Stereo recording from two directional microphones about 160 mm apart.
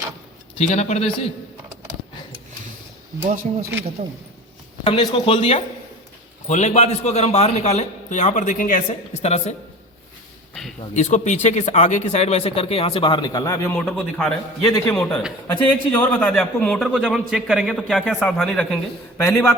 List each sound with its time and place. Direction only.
0.7 s a man's voice: 45° left (ahead or behind)
3.2 s speech: 55° right (ahead or behind)
4.8 s a man's voice: 35° left (ahead or behind); by 9.0 s 55° left (ahead or behind)
9.2 s speech: 40° left (ahead or behind)
10.5 s a sound: centre (ahead or behind)
10.9 s speech: 45° left (ahead or behind); by 13.8 s 15° left (ahead or behind)
13.8 s a man's voice: 5° left (ahead or behind)
19.2 s a man's voice: 15° left (ahead or behind)